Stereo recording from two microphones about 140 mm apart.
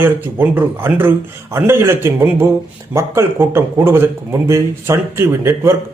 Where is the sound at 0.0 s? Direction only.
15° right (ahead or behind).